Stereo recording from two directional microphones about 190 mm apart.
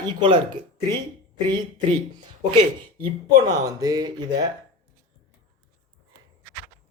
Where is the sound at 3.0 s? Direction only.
25° right (ahead or behind).